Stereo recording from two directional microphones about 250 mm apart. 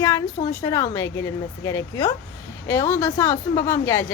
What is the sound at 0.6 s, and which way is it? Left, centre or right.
Speech, centre.